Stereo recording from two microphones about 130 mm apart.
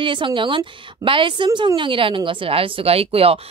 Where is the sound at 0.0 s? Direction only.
40° right (ahead or behind).